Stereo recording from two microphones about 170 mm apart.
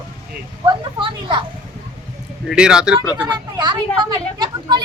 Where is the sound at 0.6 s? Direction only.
25° right (ahead or behind).